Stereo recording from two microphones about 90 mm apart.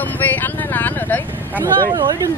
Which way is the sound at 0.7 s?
20° left (ahead or behind).